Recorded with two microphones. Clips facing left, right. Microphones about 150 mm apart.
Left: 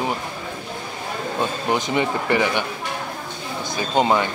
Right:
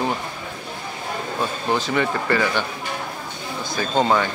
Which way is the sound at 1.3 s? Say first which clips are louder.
Left 1 dB; 20° left (ahead or behind).